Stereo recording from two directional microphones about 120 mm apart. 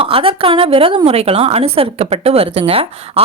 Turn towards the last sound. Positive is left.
turn(degrees=-55)  # may be behind; listen again after turning